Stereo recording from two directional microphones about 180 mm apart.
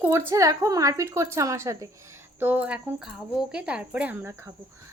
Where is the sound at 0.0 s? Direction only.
15° right (ahead or behind).